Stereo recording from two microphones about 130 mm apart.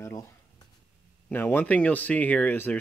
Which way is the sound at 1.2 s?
15° left (ahead or behind).